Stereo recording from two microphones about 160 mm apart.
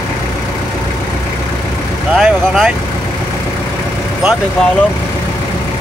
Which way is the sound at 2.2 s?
Centre (ahead or behind).